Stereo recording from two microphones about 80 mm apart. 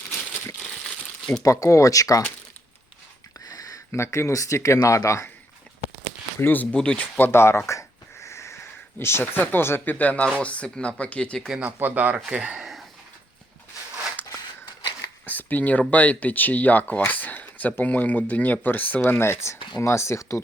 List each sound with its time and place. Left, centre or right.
0.6 s crumpling: centre
1.4 s speech: left
3.4 s a sound: left
3.9 s speech: left
6.4 s speech: left
7.3 s speech: left
7.7 s a sound: left; by 10.2 s centre
10.2 s speech: centre
11.6 s speech: right
14.3 s a sound: left
15.3 s speech: left
19.5 s a sound: left
19.8 s speech: left